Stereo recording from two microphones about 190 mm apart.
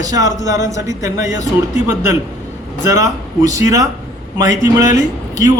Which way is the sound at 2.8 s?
15° right (ahead or behind).